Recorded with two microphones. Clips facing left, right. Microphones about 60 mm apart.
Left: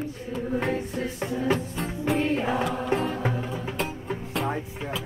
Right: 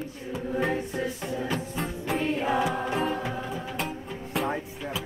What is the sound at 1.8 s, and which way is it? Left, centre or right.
Music, centre.